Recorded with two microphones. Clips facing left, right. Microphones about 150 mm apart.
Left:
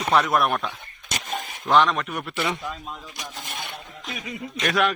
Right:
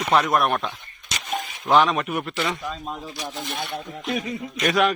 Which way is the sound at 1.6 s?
5° right (ahead or behind).